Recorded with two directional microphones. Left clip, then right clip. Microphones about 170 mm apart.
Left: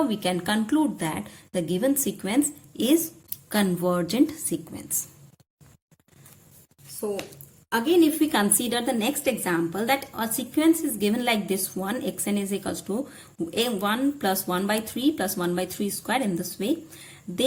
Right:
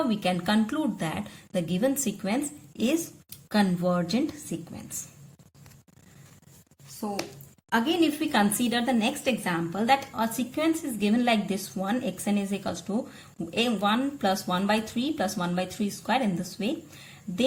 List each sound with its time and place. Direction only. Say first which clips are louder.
0.1 s a woman's voice: left 1 dB; 25° left (ahead or behind)
3.5 s speech: left 1 dB; 35° left (ahead or behind)
7.7 s a woman's voice: left 4 dB; 15° left (ahead or behind)